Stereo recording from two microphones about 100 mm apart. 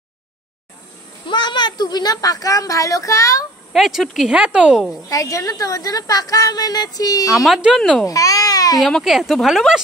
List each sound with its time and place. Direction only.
1.3 s a woman's voice: 50° left (ahead or behind); by 3.4 s 35° left (ahead or behind)
3.7 s speech: centre (ahead or behind)
5.1 s a woman's voice: 35° left (ahead or behind)
7.3 s speech: centre (ahead or behind)
8.1 s speech: 35° left (ahead or behind)
8.8 s speech: centre (ahead or behind)